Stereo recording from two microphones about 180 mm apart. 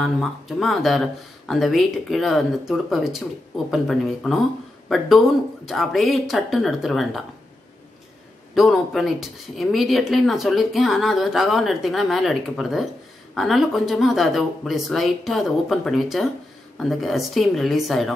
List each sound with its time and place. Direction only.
0.0 s speech: centre (ahead or behind)
8.5 s speech: centre (ahead or behind)